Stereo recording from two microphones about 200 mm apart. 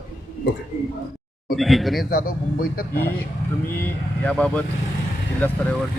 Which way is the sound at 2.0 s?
50° left (ahead or behind).